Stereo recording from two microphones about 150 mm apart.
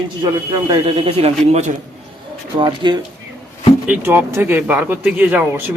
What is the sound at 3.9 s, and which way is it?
Speech, 15° right (ahead or behind).